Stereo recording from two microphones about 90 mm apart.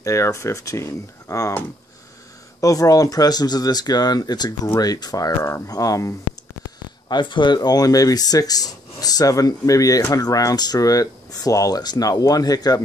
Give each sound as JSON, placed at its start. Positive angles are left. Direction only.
{"t": 0.0, "sound": "speech", "side_deg": 35}
{"t": 2.6, "sound": "speech", "side_deg": 40}
{"t": 7.1, "sound": "speech", "side_deg": 60}